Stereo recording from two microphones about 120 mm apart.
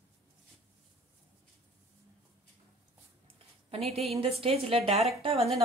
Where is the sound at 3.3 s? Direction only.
55° right (ahead or behind).